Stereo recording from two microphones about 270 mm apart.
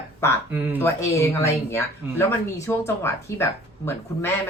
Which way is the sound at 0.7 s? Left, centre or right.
Centre.